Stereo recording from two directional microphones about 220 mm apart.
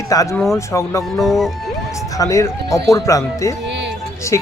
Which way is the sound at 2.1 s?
15° left (ahead or behind).